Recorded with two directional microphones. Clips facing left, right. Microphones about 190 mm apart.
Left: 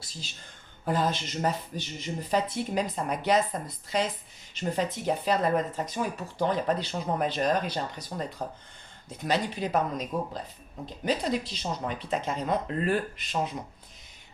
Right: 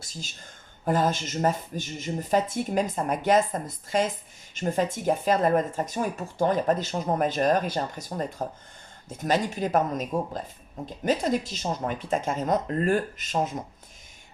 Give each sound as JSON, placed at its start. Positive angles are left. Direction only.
{"t": 0.0, "sound": "speech", "side_deg": -45}